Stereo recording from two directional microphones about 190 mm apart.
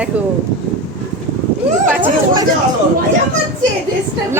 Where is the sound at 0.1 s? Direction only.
5° right (ahead or behind).